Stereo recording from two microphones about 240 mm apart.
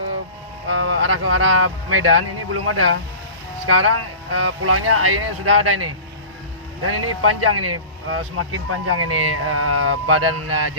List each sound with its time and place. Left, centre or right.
0.7 s speech: right